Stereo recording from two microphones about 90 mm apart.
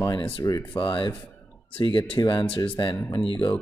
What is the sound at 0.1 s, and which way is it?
Speech, 75° left (ahead or behind).